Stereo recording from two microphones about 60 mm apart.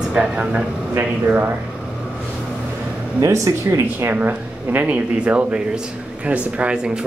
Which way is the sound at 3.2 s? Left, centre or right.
Right.